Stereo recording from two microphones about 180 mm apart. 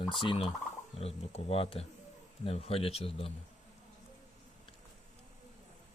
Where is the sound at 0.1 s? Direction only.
25° left (ahead or behind).